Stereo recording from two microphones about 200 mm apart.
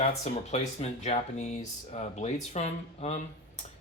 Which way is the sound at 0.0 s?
35° left (ahead or behind).